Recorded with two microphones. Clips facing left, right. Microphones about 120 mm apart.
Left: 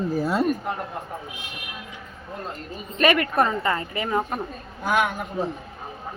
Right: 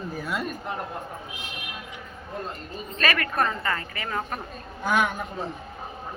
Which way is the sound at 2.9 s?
20° left (ahead or behind).